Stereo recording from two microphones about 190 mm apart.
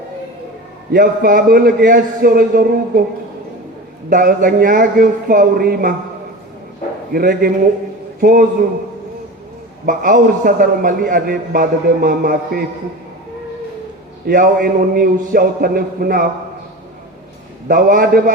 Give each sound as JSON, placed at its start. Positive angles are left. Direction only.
{"t": 0.9, "sound": "a man's voice", "side_deg": -50}
{"t": 4.1, "sound": "a man's voice", "side_deg": -45}
{"t": 7.1, "sound": "a man's voice", "side_deg": -50}
{"t": 9.8, "sound": "a man's voice", "side_deg": -45}
{"t": 14.3, "sound": "a man's voice", "side_deg": -50}
{"t": 17.7, "sound": "a man's voice", "side_deg": -50}